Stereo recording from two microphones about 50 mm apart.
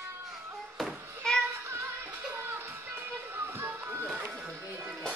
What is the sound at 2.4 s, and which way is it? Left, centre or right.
Music, right.